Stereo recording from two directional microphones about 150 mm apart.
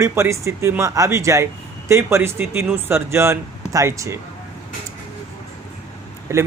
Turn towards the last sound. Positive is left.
turn(degrees=-20)  # may be behind; listen again after turning